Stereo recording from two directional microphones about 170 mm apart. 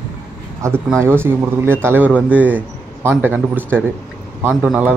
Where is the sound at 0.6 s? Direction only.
15° right (ahead or behind).